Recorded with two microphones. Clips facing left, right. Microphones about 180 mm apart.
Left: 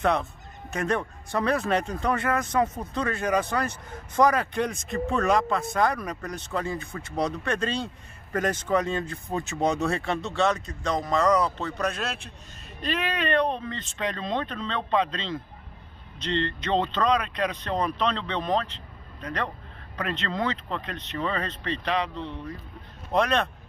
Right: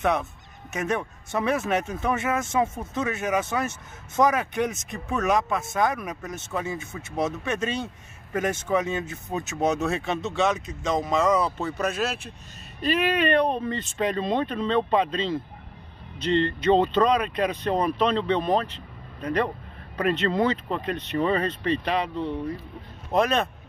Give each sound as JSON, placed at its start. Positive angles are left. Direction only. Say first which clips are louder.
{"t": 0.7, "sound": "speech", "louder": "even", "side_deg": -5}
{"t": 2.3, "sound": "speech", "louder": "even", "side_deg": -25}
{"t": 2.8, "sound": "speech", "louder": "even", "side_deg": -5}
{"t": 10.0, "sound": "speech", "louder": "right 1 dB", "side_deg": -20}
{"t": 11.2, "sound": "speech", "louder": "even", "side_deg": -5}